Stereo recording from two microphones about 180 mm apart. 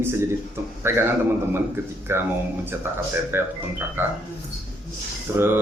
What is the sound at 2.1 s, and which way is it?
Speech, 15° right (ahead or behind).